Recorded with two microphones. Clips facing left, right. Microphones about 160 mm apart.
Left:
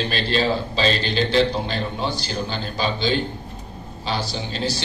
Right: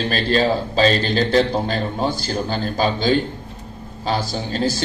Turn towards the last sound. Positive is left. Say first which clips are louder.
# right 4 dB
turn(degrees=-45)  # may be behind; listen again after turning